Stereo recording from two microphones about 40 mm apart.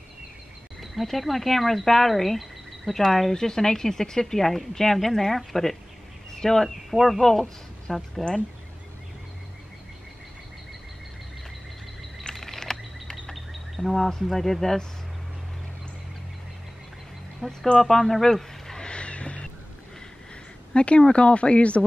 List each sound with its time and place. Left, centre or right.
0.7 s speech: centre
7.2 s speech: centre
12.4 s a sound: centre
13.5 s speech: centre
17.6 s speech: centre
18.9 s vehicle: left
20.7 s speech: left